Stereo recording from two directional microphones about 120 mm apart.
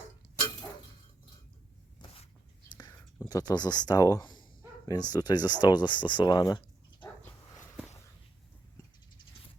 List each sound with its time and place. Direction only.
3.2 s speech: 30° left (ahead or behind)